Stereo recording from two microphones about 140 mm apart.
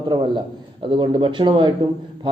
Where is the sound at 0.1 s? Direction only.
35° right (ahead or behind).